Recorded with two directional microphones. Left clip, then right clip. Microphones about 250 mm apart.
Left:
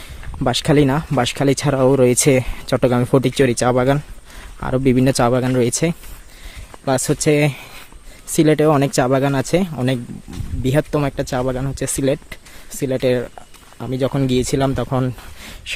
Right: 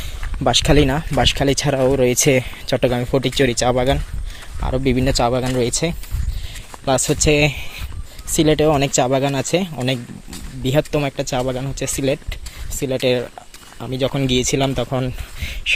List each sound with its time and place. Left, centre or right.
0.4 s speech: centre